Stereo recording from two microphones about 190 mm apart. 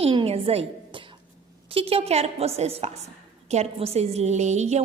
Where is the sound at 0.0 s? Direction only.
30° right (ahead or behind).